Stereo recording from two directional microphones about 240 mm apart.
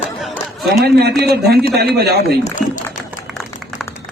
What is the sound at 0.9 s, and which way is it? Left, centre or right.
Speech, right.